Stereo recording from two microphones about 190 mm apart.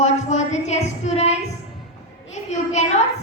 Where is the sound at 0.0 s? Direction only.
40° left (ahead or behind).